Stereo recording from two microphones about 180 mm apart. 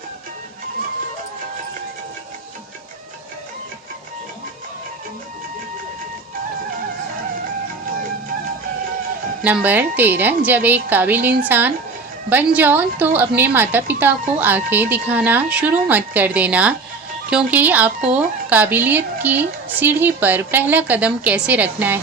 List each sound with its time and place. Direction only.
9.4 s speech: 10° right (ahead or behind)